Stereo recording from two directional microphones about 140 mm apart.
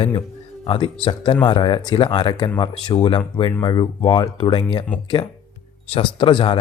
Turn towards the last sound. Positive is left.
turn(degrees=35)  # may be behind; listen again after turning